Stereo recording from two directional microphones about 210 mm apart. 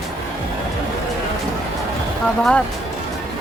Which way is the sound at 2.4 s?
5° left (ahead or behind).